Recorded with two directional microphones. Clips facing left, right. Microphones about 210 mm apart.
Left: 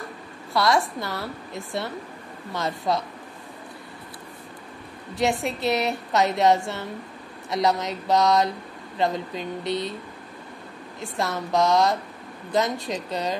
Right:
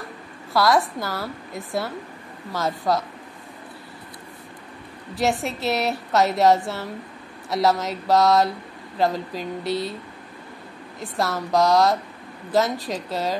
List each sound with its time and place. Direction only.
0.5 s a woman's voice: centre (ahead or behind)
5.1 s a woman's voice: centre (ahead or behind)
11.3 s a woman's voice: centre (ahead or behind)